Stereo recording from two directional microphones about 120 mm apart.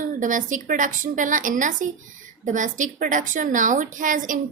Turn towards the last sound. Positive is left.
turn(degrees=-90)